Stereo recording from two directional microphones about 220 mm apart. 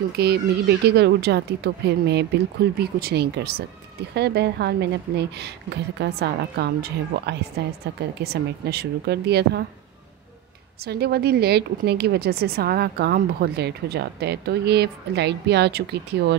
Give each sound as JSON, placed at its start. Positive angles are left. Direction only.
{"t": 0.2, "sound": "a woman's voice", "side_deg": -50}
{"t": 10.8, "sound": "a woman's voice", "side_deg": -45}